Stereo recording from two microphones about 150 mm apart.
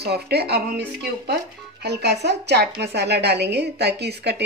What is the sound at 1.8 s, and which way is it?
Speech, 90° right.